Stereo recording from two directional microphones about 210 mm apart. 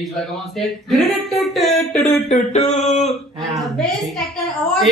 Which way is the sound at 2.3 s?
30° left (ahead or behind).